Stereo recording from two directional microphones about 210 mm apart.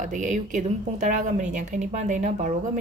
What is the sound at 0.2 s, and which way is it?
A woman's voice, 35° right (ahead or behind).